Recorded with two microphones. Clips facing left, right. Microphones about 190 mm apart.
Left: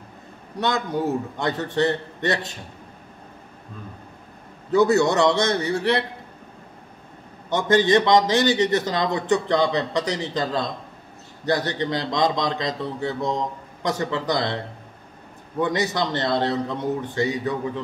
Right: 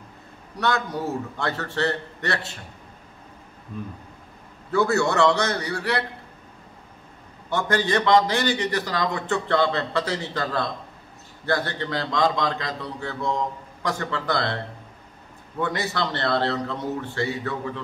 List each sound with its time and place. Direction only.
0.6 s a man's voice: 20° left (ahead or behind)
4.6 s a man's voice: 20° left (ahead or behind)
7.4 s a man's voice: 20° left (ahead or behind)
15.6 s a man's voice: 20° left (ahead or behind)